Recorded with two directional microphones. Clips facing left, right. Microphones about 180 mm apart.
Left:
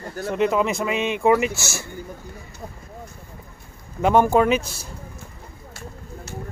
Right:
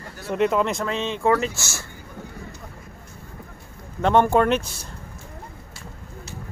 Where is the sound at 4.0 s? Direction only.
5° left (ahead or behind).